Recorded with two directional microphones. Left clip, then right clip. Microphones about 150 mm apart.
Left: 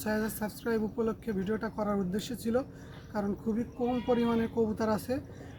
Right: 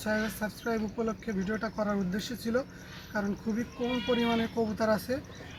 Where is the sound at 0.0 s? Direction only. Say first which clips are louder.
Right 2 dB; 40° left (ahead or behind).